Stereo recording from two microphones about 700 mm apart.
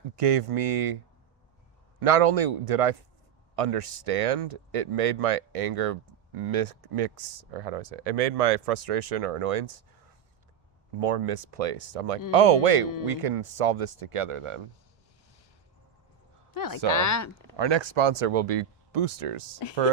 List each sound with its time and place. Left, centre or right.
0.2 s speech: right
2.0 s speech: right
11.0 s speech: right
16.6 s speech: left
17.6 s speech: right